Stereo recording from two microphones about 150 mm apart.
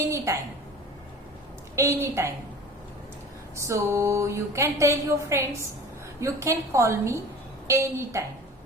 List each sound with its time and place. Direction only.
1.7 s a woman's voice: 20° right (ahead or behind)
3.5 s a woman's voice: 20° right (ahead or behind)